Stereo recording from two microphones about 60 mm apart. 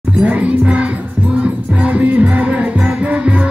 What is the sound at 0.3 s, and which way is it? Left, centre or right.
Speech, right.